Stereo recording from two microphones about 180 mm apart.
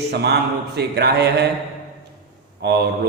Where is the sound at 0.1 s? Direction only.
65° right (ahead or behind).